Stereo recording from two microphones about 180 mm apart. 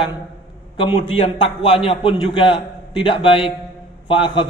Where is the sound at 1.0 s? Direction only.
35° left (ahead or behind).